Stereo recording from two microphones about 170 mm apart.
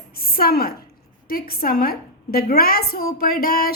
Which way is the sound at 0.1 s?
60° left (ahead or behind).